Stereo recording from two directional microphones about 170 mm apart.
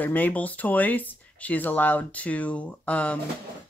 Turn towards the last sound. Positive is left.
turn(degrees=10)  # may be behind; listen again after turning